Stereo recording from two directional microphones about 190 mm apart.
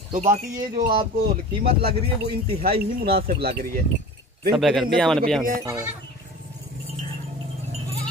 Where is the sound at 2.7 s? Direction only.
55° right (ahead or behind).